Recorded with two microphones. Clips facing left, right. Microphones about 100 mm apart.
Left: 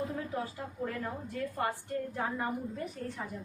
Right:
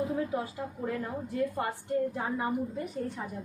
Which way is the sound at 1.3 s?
20° right (ahead or behind).